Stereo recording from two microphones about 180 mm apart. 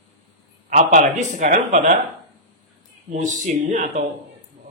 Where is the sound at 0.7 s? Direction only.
40° right (ahead or behind).